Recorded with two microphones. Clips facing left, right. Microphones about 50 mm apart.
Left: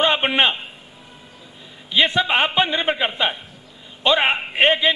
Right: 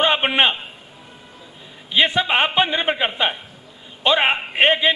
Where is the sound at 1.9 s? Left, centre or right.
Centre.